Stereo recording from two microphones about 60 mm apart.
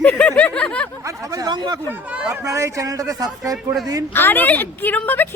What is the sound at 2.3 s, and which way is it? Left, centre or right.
A man's voice, right.